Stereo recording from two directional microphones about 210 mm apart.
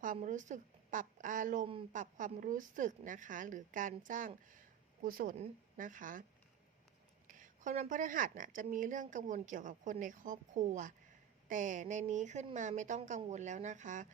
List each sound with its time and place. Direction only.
0.0 s a woman's voice: 40° right (ahead or behind)
7.3 s a woman's voice: 40° right (ahead or behind)